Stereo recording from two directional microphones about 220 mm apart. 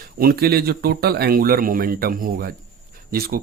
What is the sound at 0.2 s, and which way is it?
Speech, 45° right (ahead or behind).